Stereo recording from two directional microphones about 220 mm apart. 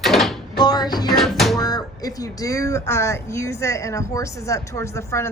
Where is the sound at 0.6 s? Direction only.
20° left (ahead or behind).